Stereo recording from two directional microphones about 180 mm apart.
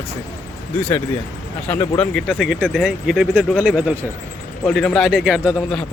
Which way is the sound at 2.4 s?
5° right (ahead or behind).